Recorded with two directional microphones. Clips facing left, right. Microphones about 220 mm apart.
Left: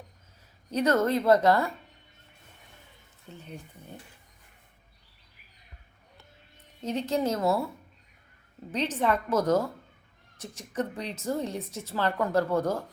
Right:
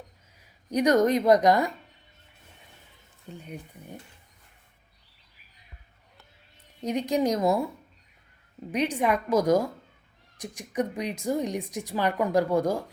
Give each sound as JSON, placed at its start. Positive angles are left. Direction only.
{"t": 0.7, "sound": "speech", "side_deg": -15}
{"t": 3.2, "sound": "speech", "side_deg": -15}
{"t": 6.8, "sound": "speech", "side_deg": -15}
{"t": 8.7, "sound": "speech", "side_deg": -10}